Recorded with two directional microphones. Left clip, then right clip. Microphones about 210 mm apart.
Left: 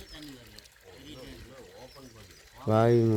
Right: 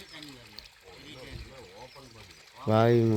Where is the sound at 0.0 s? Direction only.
50° left (ahead or behind).